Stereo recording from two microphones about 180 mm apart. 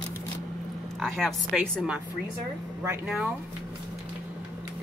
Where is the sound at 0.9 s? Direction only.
Centre (ahead or behind).